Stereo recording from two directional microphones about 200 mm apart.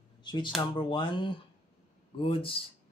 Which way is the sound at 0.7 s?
25° left (ahead or behind).